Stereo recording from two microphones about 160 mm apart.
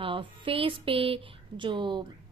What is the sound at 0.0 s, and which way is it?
A woman's voice, 35° right (ahead or behind).